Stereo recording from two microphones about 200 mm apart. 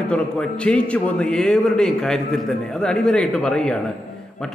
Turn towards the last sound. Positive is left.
turn(degrees=5)  # may be behind; listen again after turning